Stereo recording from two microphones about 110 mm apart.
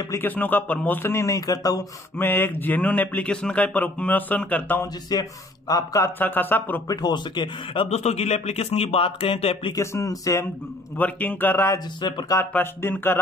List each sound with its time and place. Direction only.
0.1 s speech: 15° left (ahead or behind); by 1.9 s 35° left (ahead or behind)
2.1 s speech: 20° left (ahead or behind)
5.1 s speech: 35° left (ahead or behind)
6.1 s speech: 15° left (ahead or behind)
6.9 s speech: 40° left (ahead or behind)
7.9 s speech: 80° left; by 9.7 s 60° left (ahead or behind)
9.8 s speech: 30° left (ahead or behind)
11.0 s speech: 15° left (ahead or behind)
12.0 s speech: 45° left (ahead or behind)
12.4 s speech: 20° left (ahead or behind)